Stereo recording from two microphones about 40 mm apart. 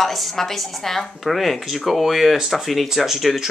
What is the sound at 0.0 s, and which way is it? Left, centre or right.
Speech, centre.